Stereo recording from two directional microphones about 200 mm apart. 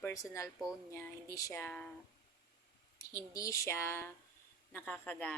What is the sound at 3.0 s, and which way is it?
A woman's voice, 15° left (ahead or behind).